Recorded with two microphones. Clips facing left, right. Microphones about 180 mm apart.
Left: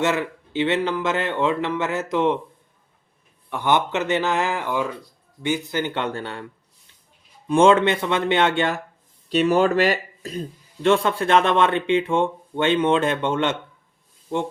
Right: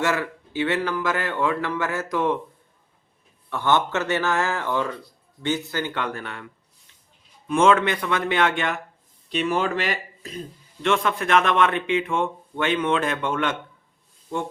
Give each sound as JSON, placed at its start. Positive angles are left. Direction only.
{"t": 0.0, "sound": "a man's voice", "side_deg": 20}
{"t": 3.5, "sound": "a man's voice", "side_deg": 15}
{"t": 7.4, "sound": "a man's voice", "side_deg": 30}
{"t": 9.3, "sound": "speech", "side_deg": 45}